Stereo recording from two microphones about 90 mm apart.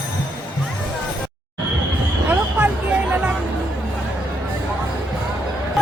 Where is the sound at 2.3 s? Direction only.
15° right (ahead or behind).